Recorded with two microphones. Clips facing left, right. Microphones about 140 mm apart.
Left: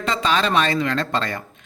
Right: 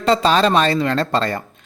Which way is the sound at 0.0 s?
35° right (ahead or behind).